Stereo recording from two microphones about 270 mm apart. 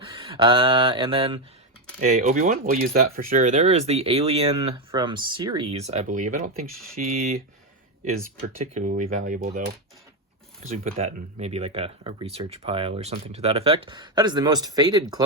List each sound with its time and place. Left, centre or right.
0.0 s mantra: centre
2.0 s speech: right
8.5 s speech: right